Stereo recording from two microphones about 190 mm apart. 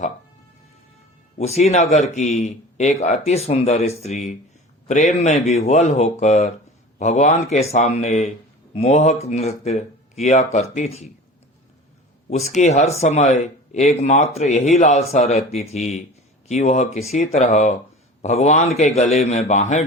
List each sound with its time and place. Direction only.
1.4 s speech: 35° left (ahead or behind)
12.3 s speech: 35° left (ahead or behind)